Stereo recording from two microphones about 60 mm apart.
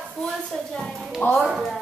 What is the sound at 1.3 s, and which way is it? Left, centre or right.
Child singing, centre.